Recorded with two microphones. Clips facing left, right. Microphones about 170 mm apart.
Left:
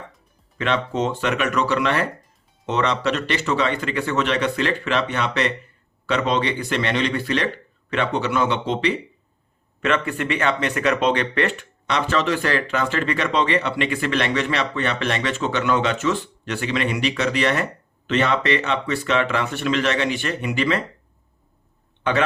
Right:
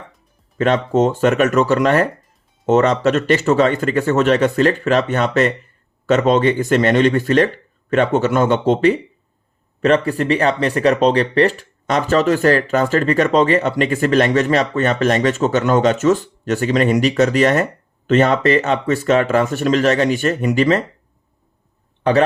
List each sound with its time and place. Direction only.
0.6 s speech: 45° right (ahead or behind)